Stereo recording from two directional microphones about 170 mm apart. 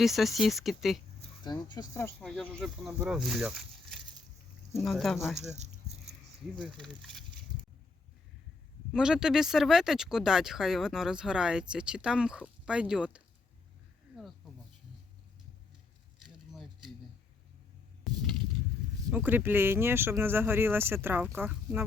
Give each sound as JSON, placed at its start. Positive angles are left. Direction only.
{"t": 0.0, "sound": "speech", "side_deg": 0}
{"t": 1.7, "sound": "speech", "side_deg": 20}
{"t": 2.2, "sound": "speech", "side_deg": 5}
{"t": 5.5, "sound": "a sound", "side_deg": -40}
{"t": 6.8, "sound": "speech", "side_deg": 0}
{"t": 8.9, "sound": "speech", "side_deg": -5}
{"t": 16.5, "sound": "a sound", "side_deg": 0}
{"t": 19.1, "sound": "speech", "side_deg": -10}